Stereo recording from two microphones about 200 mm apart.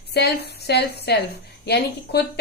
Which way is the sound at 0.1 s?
55° left (ahead or behind).